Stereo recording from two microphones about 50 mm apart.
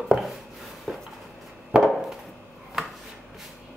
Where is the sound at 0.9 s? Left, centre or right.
Centre.